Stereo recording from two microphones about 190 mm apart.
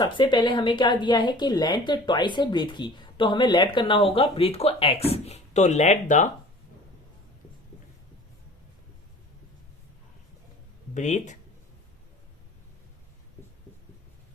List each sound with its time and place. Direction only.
0.0 s speech: 25° left (ahead or behind); by 6.2 s 40° left (ahead or behind)
10.9 s speech: 40° left (ahead or behind)